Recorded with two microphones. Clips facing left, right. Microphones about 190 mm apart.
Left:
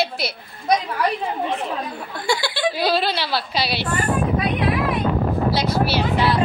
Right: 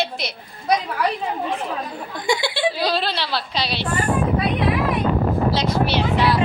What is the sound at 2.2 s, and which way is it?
Speech, 20° right (ahead or behind).